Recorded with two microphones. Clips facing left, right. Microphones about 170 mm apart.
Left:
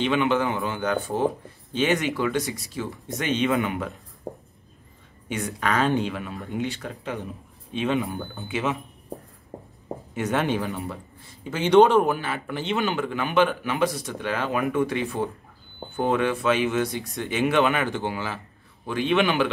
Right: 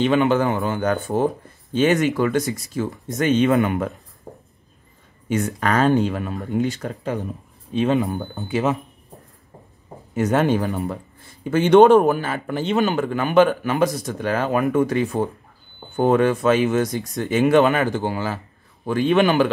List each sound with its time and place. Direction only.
0.0 s a man's voice: 45° right (ahead or behind)
5.3 s a man's voice: 45° right (ahead or behind)
10.1 s a man's voice: 40° right (ahead or behind)